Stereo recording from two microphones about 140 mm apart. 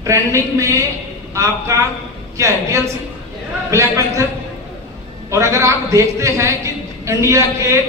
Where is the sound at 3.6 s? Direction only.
20° right (ahead or behind).